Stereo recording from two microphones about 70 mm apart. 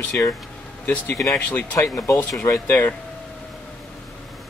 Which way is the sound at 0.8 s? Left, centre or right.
Left.